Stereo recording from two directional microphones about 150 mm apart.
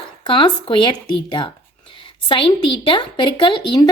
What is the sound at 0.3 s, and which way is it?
A woman's voice, 35° left (ahead or behind).